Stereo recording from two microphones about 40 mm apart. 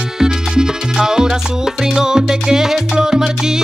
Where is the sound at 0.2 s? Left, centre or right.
Centre.